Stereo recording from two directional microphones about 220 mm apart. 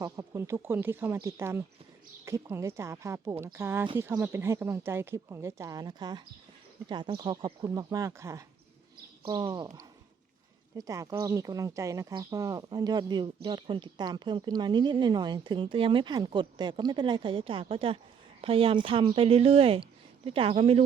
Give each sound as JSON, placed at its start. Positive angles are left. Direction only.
{"t": 0.0, "sound": "a woman's voice", "side_deg": -15}
{"t": 10.8, "sound": "speech", "side_deg": -15}